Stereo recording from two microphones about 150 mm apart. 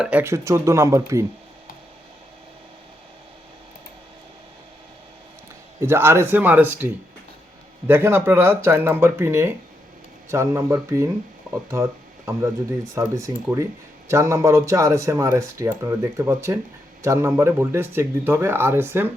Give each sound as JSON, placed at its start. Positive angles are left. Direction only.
{"t": 0.0, "sound": "speech", "side_deg": -10}
{"t": 5.8, "sound": "speech", "side_deg": -15}